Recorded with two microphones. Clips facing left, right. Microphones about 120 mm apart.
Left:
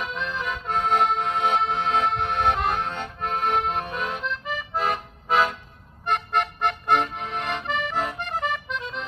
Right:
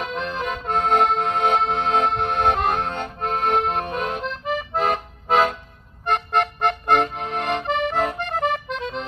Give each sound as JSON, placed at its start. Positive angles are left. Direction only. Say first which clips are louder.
{"t": 0.1, "sound": "music", "louder": "right 3 dB", "side_deg": -60}
{"t": 2.1, "sound": "accordion", "louder": "right 3 dB", "side_deg": -55}
{"t": 3.2, "sound": "accordion", "louder": "right 3 dB", "side_deg": -30}
{"t": 3.7, "sound": "accordion", "louder": "right 4 dB", "side_deg": -50}
{"t": 4.6, "sound": "music", "louder": "right 4 dB", "side_deg": -55}
{"t": 6.0, "sound": "accordion", "louder": "right 3 dB", "side_deg": -65}